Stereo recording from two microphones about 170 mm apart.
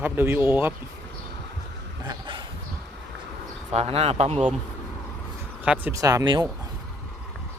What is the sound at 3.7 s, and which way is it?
Speech, 35° right (ahead or behind).